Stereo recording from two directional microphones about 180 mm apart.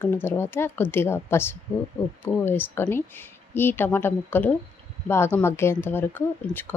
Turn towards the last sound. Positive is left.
turn(degrees=10)  # may be behind; listen again after turning